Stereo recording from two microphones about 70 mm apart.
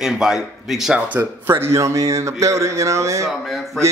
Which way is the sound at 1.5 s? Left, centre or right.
Right.